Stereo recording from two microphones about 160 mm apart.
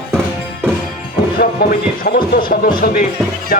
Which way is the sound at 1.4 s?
65° left (ahead or behind).